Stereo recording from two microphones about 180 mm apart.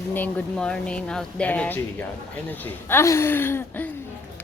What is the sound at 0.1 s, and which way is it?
Speech, 10° left (ahead or behind).